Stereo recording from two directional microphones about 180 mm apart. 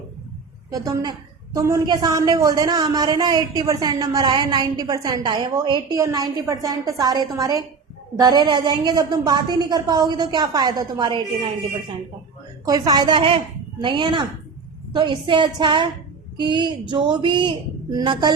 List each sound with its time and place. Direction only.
0.7 s a man's voice: 20° right (ahead or behind)
12.6 s a man's voice: 20° right (ahead or behind)